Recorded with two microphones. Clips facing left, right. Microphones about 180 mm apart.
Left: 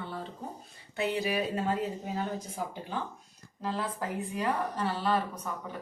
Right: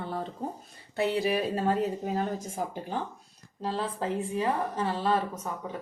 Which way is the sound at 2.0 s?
45° right (ahead or behind).